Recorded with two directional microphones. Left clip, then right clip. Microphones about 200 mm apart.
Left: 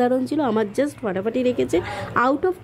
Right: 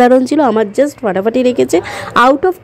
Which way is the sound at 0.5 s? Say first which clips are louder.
Right 10 dB; 15° right (ahead or behind).